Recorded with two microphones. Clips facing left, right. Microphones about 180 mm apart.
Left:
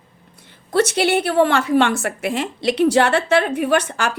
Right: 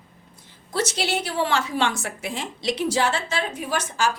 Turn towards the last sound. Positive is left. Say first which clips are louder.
# left 6 dB
turn(degrees=65)  # may be behind; listen again after turning